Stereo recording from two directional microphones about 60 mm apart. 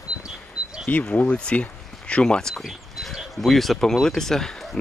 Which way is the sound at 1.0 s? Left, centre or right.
Left.